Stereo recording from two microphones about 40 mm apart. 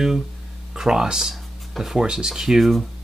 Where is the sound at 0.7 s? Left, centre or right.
Centre.